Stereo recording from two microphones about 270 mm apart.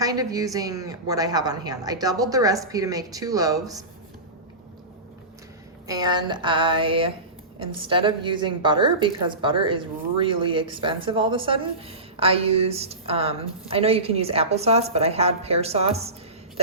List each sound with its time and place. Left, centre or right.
0.0 s a woman's voice: centre
5.9 s a woman's voice: centre